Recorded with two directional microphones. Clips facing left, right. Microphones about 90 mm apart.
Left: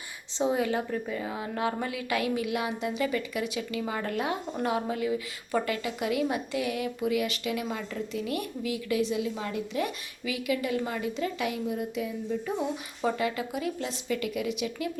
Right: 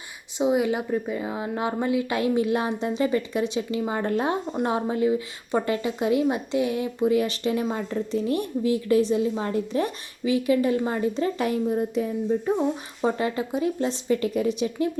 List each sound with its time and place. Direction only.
0.3 s a woman's voice: 15° right (ahead or behind); by 14.8 s 35° right (ahead or behind)